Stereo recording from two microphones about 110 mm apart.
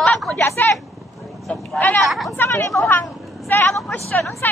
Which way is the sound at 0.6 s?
15° left (ahead or behind).